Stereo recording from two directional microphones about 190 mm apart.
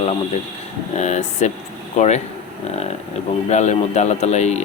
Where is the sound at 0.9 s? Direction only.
35° left (ahead or behind).